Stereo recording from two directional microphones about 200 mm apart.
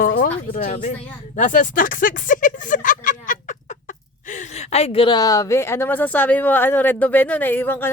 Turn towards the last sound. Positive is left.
turn(degrees=10)  # may be behind; listen again after turning